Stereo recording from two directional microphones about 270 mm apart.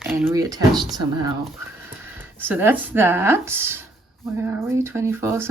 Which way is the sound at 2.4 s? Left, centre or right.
Centre.